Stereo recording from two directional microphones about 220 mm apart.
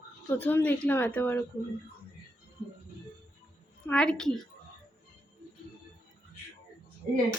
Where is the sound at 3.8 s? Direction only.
5° left (ahead or behind).